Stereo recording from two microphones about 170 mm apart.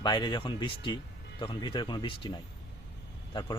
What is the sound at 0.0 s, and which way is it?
Speech, 25° left (ahead or behind).